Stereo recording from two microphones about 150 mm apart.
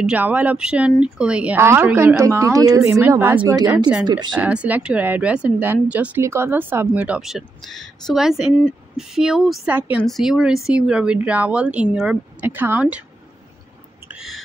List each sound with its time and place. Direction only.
0.0 s speech: 10° right (ahead or behind); by 3.0 s 25° right (ahead or behind)
3.0 s speech: 15° right (ahead or behind)
4.0 s speech: 30° right (ahead or behind)
4.4 s a woman's voice: 10° right (ahead or behind)
14.0 s owl: 5° right (ahead or behind)